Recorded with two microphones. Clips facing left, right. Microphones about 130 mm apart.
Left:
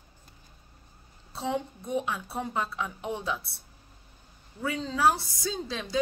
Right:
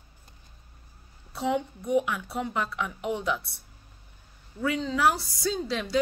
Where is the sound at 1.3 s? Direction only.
25° left (ahead or behind).